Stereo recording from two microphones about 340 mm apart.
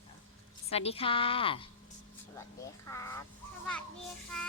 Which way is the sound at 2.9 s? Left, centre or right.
Centre.